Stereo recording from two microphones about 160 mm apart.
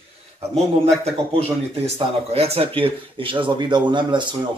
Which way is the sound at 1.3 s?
40° right (ahead or behind).